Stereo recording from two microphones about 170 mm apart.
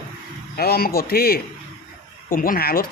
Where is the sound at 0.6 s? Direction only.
65° left (ahead or behind).